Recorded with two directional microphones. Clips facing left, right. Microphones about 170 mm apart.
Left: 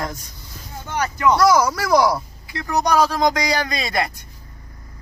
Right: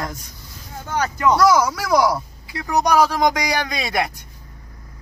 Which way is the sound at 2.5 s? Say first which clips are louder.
Right 1 dB; 15° right (ahead or behind).